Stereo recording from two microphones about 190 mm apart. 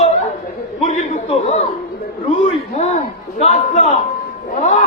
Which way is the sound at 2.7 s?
35° left (ahead or behind).